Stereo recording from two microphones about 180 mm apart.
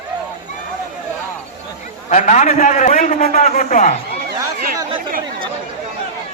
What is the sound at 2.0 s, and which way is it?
A man's voice, 40° left (ahead or behind).